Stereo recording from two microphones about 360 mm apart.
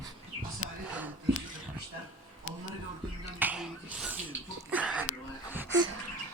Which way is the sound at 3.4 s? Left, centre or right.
Centre.